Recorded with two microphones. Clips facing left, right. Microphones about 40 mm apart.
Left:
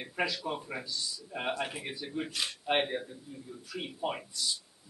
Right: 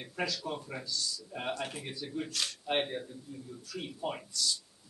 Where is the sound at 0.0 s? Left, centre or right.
Left.